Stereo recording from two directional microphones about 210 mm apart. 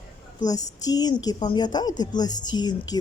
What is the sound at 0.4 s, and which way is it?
A woman's voice, 20° left (ahead or behind).